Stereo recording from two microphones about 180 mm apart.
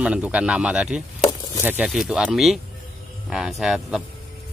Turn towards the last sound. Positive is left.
turn(degrees=0)  # may be behind; listen again after turning